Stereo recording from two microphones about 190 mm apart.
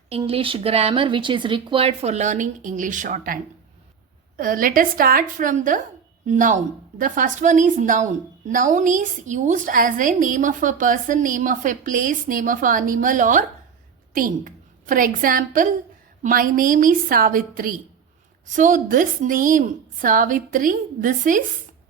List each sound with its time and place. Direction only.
0.1 s a woman's voice: 30° right (ahead or behind)
4.4 s a woman's voice: 45° right (ahead or behind)